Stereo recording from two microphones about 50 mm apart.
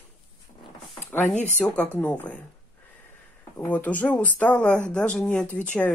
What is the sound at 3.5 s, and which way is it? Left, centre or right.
Speech, left.